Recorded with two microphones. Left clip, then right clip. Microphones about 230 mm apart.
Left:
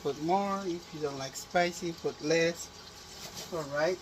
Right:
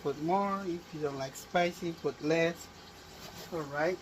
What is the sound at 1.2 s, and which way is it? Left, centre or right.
Speech, centre.